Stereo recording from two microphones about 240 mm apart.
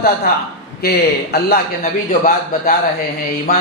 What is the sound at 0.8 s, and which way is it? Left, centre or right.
A man's voice, left.